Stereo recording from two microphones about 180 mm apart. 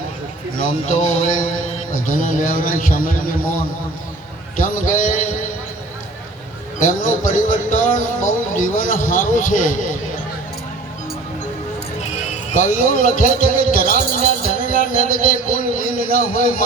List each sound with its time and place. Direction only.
0.6 s speech: 45° left (ahead or behind)
4.6 s speech: 45° left (ahead or behind)
6.7 s speech: 45° left (ahead or behind)
12.3 s a man's voice: 45° left (ahead or behind)